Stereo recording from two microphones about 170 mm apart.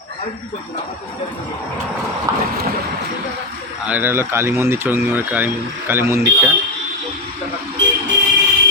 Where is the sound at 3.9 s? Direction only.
10° right (ahead or behind).